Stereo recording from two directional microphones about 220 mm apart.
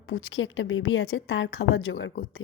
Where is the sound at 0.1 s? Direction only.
60° left (ahead or behind).